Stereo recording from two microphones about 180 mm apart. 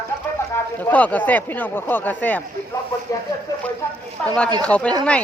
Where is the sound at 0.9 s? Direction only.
10° left (ahead or behind).